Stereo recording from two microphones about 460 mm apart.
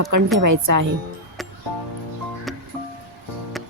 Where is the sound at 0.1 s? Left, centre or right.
Right.